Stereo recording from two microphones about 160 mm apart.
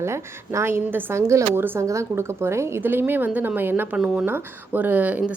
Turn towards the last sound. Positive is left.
turn(degrees=-10)  # may be behind; listen again after turning